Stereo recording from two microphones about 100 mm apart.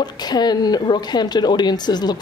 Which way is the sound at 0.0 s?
45° left (ahead or behind).